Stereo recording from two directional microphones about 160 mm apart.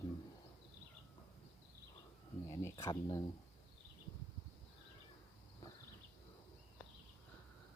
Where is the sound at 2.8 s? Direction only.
20° left (ahead or behind).